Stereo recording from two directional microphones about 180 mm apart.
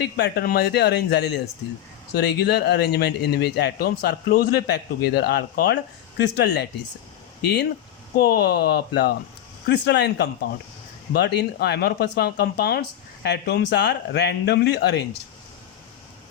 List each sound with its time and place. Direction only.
0.0 s speech: 65° left (ahead or behind)